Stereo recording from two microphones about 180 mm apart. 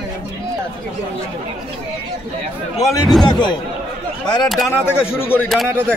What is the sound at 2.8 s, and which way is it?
Speech, centre (ahead or behind).